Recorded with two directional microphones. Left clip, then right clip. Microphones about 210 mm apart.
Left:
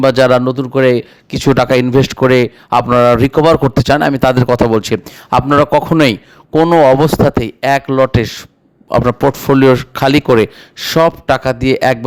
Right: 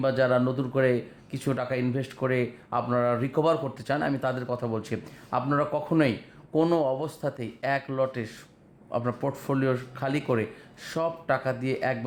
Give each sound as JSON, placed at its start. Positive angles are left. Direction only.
{"t": 0.0, "sound": "a man's voice", "side_deg": 50}